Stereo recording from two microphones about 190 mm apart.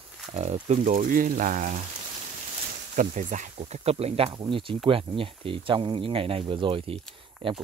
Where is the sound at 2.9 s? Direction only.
40° right (ahead or behind).